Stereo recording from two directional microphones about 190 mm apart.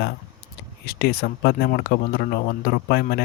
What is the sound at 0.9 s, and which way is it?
Speech, 55° left (ahead or behind).